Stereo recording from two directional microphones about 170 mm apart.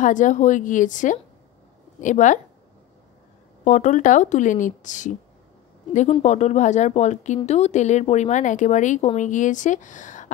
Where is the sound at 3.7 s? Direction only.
45° left (ahead or behind).